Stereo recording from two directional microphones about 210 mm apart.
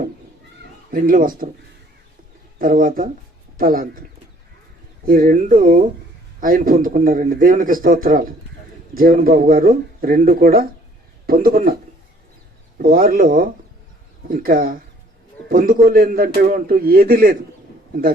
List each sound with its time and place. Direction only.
0.6 s speech: 45° right (ahead or behind)
2.6 s a man's voice: 40° right (ahead or behind)
5.0 s a man's voice: 40° right (ahead or behind)
12.8 s a man's voice: 45° right (ahead or behind)